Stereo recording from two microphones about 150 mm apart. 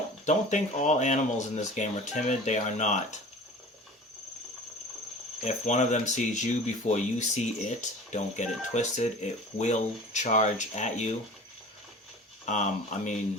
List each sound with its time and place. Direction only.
0.3 s speech: 55° left (ahead or behind)
5.5 s speech: 55° left (ahead or behind)
12.5 s speech: 55° left (ahead or behind)